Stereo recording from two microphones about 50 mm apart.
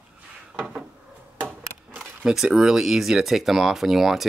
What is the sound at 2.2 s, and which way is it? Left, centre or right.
Speech, centre.